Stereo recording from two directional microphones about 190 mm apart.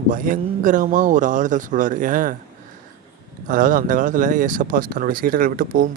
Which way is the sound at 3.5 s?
45° right (ahead or behind).